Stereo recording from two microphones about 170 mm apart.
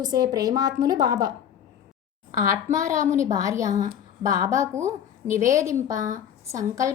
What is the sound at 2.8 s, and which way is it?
Speech, 20° right (ahead or behind).